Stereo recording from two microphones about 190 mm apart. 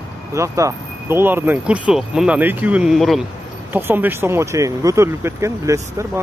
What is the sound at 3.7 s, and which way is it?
Speech, 10° right (ahead or behind).